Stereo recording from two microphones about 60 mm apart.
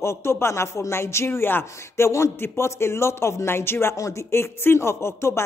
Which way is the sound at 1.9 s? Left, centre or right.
Left.